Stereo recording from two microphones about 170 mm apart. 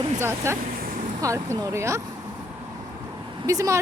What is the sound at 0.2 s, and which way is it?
Speech, 15° right (ahead or behind).